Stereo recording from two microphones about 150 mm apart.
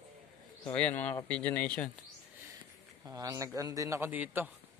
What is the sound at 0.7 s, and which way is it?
A man's voice, 10° left (ahead or behind).